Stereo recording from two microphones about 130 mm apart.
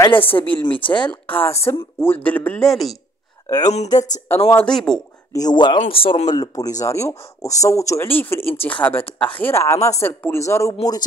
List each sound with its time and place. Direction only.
0.1 s speech: 45° left (ahead or behind)
1.2 s speech: 15° left (ahead or behind)
3.4 s speech: 30° left (ahead or behind)
4.6 s speech: 5° left (ahead or behind)
5.3 s speech: 30° left (ahead or behind)
5.9 s speech: 45° left (ahead or behind)
6.3 s speech: 30° left (ahead or behind)